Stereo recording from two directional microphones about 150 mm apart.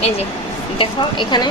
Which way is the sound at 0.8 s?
30° left (ahead or behind).